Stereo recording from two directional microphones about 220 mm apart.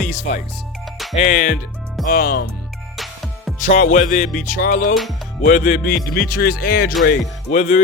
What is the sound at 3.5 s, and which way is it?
Speech, 35° left (ahead or behind).